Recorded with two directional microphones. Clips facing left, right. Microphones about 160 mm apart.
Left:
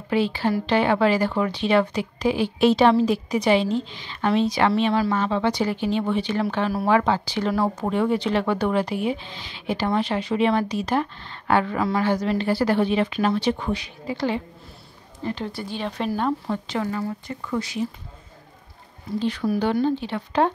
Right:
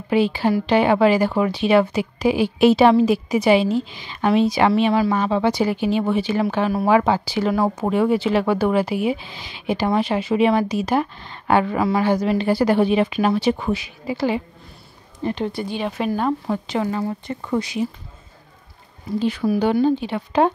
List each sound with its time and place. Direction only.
0.1 s speech: 15° right (ahead or behind)
16.7 s speech: 20° right (ahead or behind)
17.3 s speech: 40° right (ahead or behind)
17.6 s speech: 15° right (ahead or behind)
19.1 s speech: 10° right (ahead or behind)